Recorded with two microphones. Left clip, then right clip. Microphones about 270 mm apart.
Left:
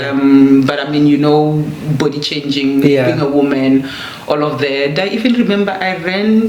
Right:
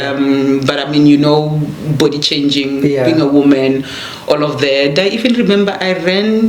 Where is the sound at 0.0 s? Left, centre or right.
Right.